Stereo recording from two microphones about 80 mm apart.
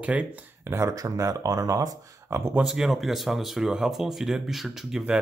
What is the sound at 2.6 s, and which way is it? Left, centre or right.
Speech, centre.